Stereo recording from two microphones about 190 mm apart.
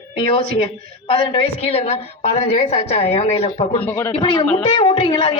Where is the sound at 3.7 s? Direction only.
10° left (ahead or behind).